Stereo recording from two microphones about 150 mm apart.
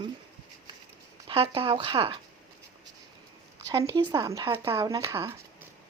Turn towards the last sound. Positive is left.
turn(degrees=-20)  # may be behind; listen again after turning